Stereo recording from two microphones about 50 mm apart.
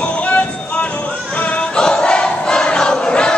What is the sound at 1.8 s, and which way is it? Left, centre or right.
Choir, centre.